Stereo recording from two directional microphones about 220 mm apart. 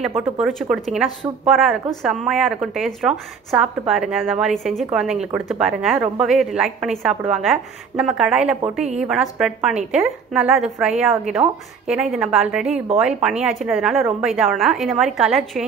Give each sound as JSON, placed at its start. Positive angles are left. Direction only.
{"t": 0.4, "sound": "a woman's voice", "side_deg": 0}
{"t": 12.7, "sound": "a woman's voice", "side_deg": -30}
{"t": 13.0, "sound": "a woman's voice", "side_deg": -5}